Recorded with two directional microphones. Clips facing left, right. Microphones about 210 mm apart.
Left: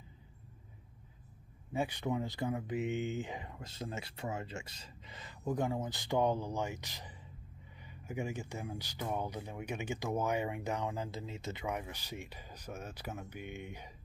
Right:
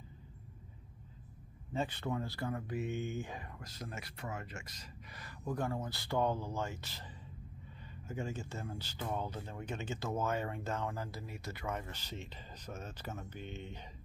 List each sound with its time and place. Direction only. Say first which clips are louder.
1.7 s speech: left 2 dB; 10° left (ahead or behind)
8.1 s speech: left 2 dB; 15° left (ahead or behind)